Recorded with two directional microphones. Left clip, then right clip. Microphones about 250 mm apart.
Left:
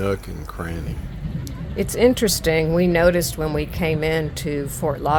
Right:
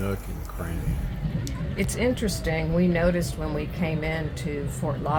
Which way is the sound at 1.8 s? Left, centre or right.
Left.